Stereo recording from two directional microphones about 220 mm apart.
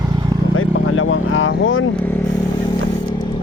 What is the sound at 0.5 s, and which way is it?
Vehicle, 65° left (ahead or behind).